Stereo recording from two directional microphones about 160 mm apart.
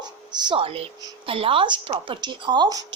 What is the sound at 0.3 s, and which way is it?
A woman's voice, 30° right (ahead or behind).